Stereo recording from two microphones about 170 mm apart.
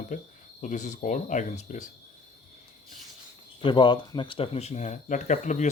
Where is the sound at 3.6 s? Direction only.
30° left (ahead or behind); by 5.6 s 45° left (ahead or behind).